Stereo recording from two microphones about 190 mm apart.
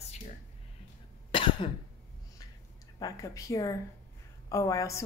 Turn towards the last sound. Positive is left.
turn(degrees=15)  # may be behind; listen again after turning